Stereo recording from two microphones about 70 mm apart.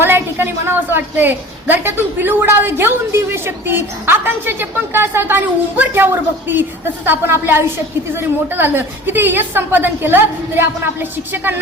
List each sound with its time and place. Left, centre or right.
0.0 s a woman's voice: right